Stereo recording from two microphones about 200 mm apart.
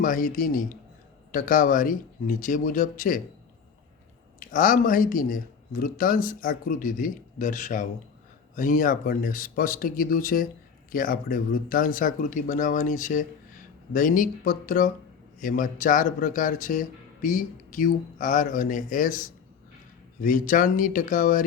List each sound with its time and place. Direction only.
0.0 s speech: 45° left (ahead or behind)
4.4 s speech: 45° left (ahead or behind)